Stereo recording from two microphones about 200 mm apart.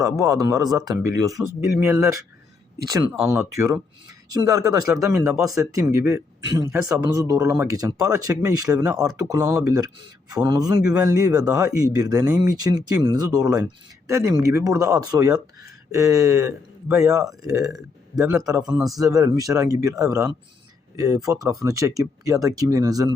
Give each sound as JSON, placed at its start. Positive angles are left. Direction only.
{"t": 0.0, "sound": "speech", "side_deg": -15}
{"t": 18.2, "sound": "speech", "side_deg": 0}
{"t": 18.5, "sound": "speech", "side_deg": -20}